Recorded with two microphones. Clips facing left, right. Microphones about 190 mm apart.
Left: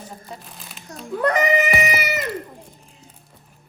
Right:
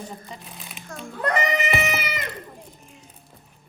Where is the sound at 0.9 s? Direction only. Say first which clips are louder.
Even; 35° left (ahead or behind).